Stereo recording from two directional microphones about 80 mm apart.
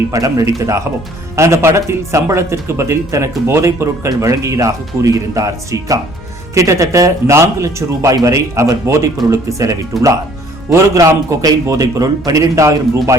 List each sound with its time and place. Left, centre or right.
0.1 s speech: right
9.9 s speech: centre
10.7 s a man's voice: right